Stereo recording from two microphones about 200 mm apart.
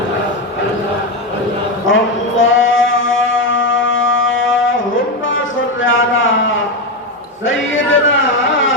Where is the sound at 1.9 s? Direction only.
75° left (ahead or behind).